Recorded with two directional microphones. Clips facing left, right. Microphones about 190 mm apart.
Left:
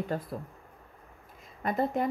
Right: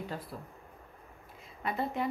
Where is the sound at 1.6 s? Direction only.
45° left (ahead or behind).